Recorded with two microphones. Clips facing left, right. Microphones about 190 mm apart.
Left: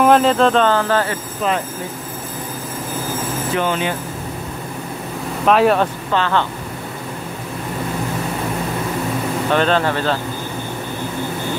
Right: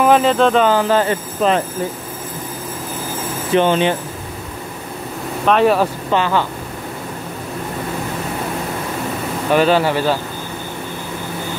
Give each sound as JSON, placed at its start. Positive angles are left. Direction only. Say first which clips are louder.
{"t": 0.0, "sound": "speech", "louder": "even", "side_deg": 0}
{"t": 3.5, "sound": "speech", "louder": "right 7 dB", "side_deg": -25}
{"t": 5.5, "sound": "speech", "louder": "even", "side_deg": 0}
{"t": 6.1, "sound": "speech", "louder": "right 1 dB", "side_deg": -10}
{"t": 9.5, "sound": "speech", "louder": "right 3 dB", "side_deg": -5}